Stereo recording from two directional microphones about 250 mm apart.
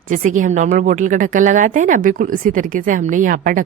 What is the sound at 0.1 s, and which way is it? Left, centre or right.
A woman's voice, right.